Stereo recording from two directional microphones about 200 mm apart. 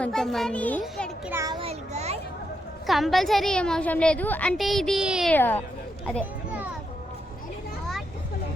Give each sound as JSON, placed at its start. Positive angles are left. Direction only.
{"t": 0.0, "sound": "a woman's voice", "side_deg": 0}
{"t": 1.3, "sound": "a child's voice", "side_deg": -15}
{"t": 1.6, "sound": "a child's voice", "side_deg": -30}
{"t": 2.8, "sound": "a woman's voice", "side_deg": 0}
{"t": 5.3, "sound": "speech", "side_deg": 10}